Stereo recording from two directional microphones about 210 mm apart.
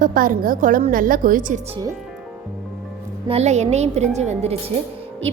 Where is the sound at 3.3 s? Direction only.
30° right (ahead or behind).